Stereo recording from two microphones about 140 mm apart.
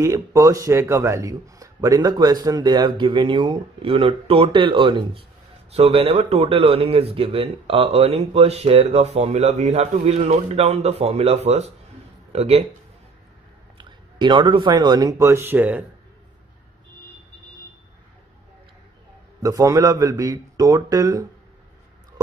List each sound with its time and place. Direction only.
0.0 s a man's voice: 25° right (ahead or behind); by 12.6 s 50° right (ahead or behind)
13.7 s speech: 35° right (ahead or behind); by 15.8 s 15° right (ahead or behind)
19.4 s a man's voice: 25° right (ahead or behind)